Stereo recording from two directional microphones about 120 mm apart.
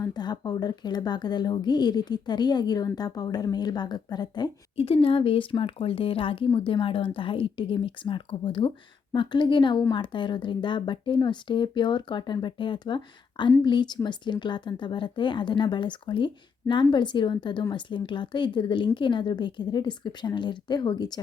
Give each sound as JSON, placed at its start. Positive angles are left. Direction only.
{"t": 0.0, "sound": "speech", "side_deg": 35}
{"t": 4.8, "sound": "a woman's voice", "side_deg": 50}